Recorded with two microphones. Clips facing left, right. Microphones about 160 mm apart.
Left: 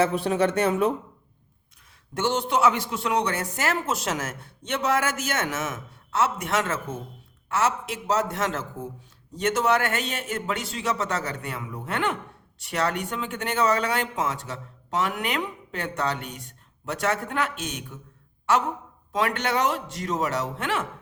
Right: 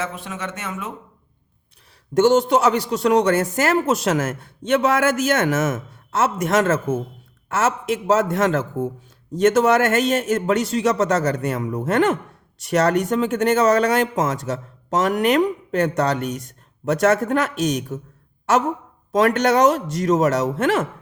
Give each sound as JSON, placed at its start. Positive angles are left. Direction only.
{"t": 0.0, "sound": "speech", "side_deg": 35}
{"t": 2.1, "sound": "speech", "side_deg": -45}
{"t": 19.1, "sound": "speech", "side_deg": -45}